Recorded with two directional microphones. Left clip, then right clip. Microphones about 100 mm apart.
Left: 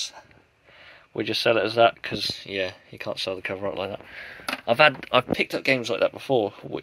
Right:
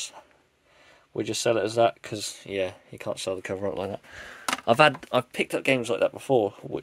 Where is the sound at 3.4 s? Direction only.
90° right.